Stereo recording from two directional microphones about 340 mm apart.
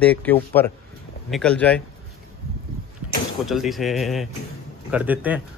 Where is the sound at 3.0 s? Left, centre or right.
Right.